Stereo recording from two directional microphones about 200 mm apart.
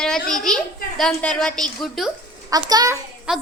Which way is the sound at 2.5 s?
20° right (ahead or behind).